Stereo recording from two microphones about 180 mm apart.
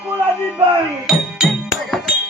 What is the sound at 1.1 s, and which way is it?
Music, centre (ahead or behind).